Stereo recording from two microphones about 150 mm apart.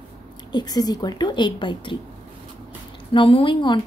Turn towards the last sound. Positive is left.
turn(degrees=30)  # may be behind; listen again after turning